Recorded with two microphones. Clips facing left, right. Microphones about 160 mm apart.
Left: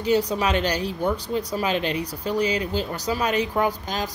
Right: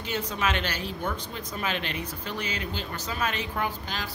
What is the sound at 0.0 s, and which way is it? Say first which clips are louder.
Speech: left 8 dB; 35° left (ahead or behind).